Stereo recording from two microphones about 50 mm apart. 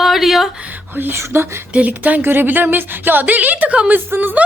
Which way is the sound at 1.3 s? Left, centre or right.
Right.